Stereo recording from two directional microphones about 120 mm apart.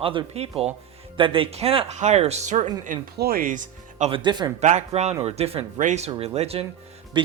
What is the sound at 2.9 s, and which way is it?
Speech, 90° right.